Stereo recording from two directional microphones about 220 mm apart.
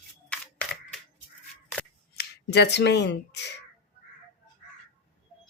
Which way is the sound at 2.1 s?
50° left (ahead or behind).